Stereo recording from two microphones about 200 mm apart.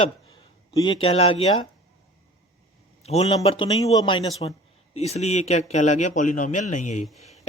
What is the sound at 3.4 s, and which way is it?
Speech, 25° left (ahead or behind).